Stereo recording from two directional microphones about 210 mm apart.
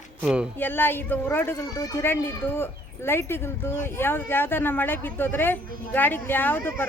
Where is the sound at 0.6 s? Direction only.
10° left (ahead or behind).